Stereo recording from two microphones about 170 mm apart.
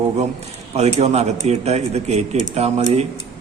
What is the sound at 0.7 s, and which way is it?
A man's voice, 40° right (ahead or behind).